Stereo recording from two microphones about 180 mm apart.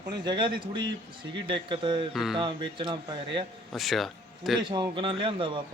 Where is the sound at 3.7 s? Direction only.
Centre (ahead or behind).